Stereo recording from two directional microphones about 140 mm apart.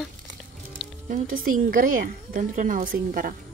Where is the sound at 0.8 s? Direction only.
5° right (ahead or behind).